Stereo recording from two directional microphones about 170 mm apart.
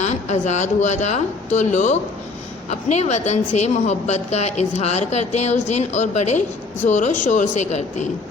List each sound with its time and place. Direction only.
0.0 s a woman's voice: 45° left (ahead or behind)